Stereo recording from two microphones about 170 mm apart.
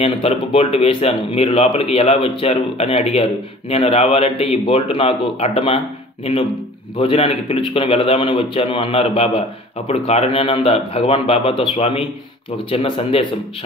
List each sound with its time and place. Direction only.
0.0 s speech: 35° left (ahead or behind)
7.0 s speech: 35° left (ahead or behind)